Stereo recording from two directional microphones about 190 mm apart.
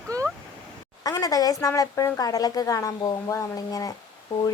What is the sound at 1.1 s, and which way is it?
A woman's voice, 20° left (ahead or behind).